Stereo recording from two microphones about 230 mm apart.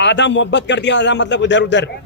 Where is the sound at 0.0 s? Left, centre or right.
Left.